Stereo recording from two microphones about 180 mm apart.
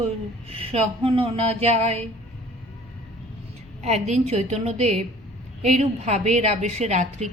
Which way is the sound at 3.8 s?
40° right (ahead or behind).